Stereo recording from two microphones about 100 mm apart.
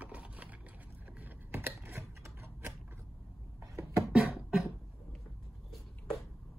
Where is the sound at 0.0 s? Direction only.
15° right (ahead or behind).